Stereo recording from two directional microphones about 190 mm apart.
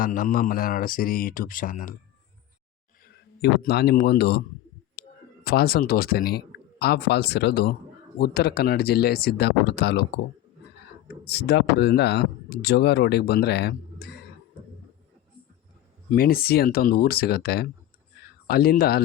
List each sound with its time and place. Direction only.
0.0 s speech: 45° left (ahead or behind)
3.0 s a man's voice: 55° left (ahead or behind)
11.3 s speech: 60° left (ahead or behind)
16.1 s speech: 50° left (ahead or behind)